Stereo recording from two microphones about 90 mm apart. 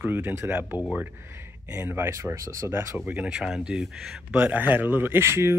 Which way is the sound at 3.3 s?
5° right (ahead or behind).